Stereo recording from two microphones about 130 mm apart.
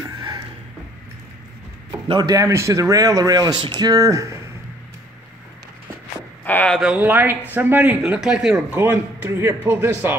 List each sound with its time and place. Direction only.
2.0 s speech: 35° right (ahead or behind)
6.4 s speech: 10° left (ahead or behind)
6.8 s speech: 10° right (ahead or behind)
8.7 s speech: 15° right (ahead or behind)